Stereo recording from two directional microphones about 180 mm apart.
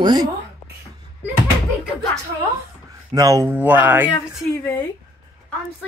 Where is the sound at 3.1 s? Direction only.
20° right (ahead or behind).